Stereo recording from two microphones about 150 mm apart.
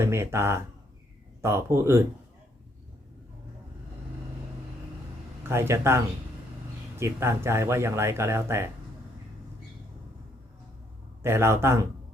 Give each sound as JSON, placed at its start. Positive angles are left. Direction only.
{"t": 0.0, "sound": "speech", "side_deg": -15}
{"t": 5.4, "sound": "a man's voice", "side_deg": -15}
{"t": 7.0, "sound": "speech", "side_deg": -15}
{"t": 11.2, "sound": "speech", "side_deg": -15}